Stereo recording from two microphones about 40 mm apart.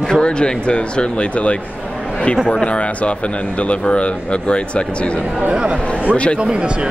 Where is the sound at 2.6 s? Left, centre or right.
Left.